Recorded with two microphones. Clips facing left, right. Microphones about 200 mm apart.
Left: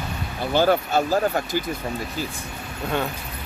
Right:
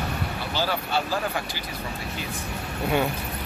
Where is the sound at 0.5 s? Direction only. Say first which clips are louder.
Left 8 dB; 50° left (ahead or behind).